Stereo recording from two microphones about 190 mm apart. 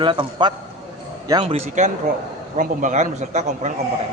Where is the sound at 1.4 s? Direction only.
35° right (ahead or behind).